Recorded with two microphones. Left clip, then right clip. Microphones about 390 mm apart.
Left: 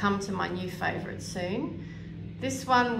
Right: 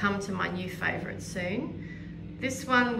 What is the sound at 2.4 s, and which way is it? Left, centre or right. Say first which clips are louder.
Speech: left 1 dB; centre.